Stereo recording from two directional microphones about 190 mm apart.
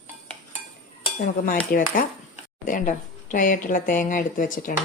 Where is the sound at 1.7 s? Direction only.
50° left (ahead or behind).